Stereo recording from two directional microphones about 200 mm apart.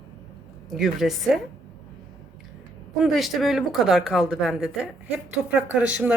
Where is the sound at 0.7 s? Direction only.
Centre (ahead or behind).